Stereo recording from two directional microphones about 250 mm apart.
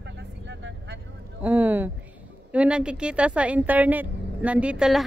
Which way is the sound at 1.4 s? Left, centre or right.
Centre.